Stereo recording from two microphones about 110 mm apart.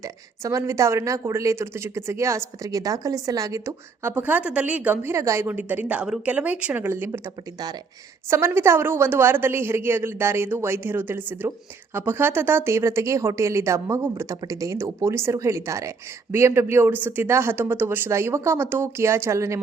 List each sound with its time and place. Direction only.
0.0 s speech: 30° right (ahead or behind)
4.1 s a woman's voice: 15° right (ahead or behind)